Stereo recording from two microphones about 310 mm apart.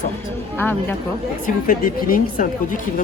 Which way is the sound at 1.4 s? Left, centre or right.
Left.